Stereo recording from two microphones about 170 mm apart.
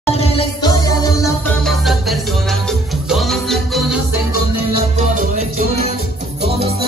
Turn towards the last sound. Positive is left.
turn(degrees=-45)  # may be behind; listen again after turning